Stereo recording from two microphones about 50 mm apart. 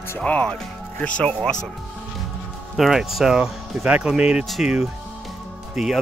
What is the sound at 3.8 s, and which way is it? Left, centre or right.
Speech, right.